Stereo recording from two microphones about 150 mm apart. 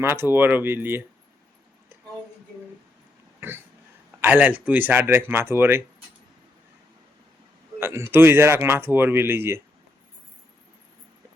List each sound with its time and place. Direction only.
0.0 s speech: 15° right (ahead or behind)
4.2 s speech: 10° right (ahead or behind)
7.8 s speech: 15° right (ahead or behind)